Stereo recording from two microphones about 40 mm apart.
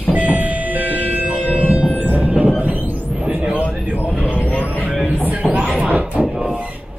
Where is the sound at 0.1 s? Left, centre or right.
Right.